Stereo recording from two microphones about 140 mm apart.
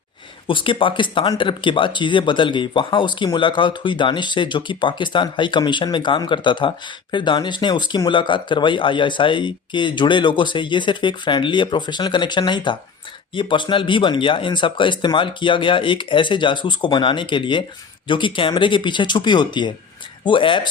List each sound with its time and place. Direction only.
0.4 s speech: 35° left (ahead or behind)